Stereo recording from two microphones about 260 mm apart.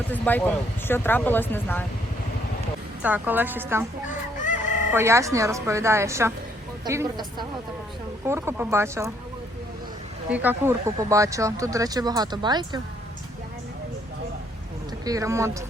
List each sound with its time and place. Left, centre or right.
0.1 s speech: centre
3.0 s speech: centre
10.2 s speech: centre
15.0 s speech: centre